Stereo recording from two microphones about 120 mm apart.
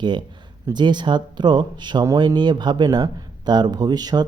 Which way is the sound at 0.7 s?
40° right (ahead or behind).